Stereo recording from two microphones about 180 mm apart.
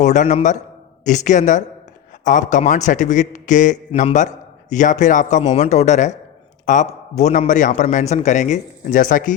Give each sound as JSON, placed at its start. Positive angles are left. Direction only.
{"t": 0.0, "sound": "a man's voice", "side_deg": 45}